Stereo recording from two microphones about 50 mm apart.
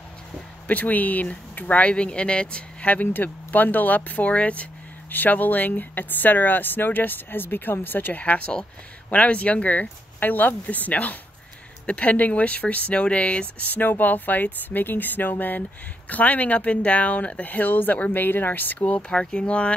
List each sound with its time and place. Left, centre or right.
0.7 s speech: left
2.9 s speech: left
5.1 s speech: left
18.8 s speech: left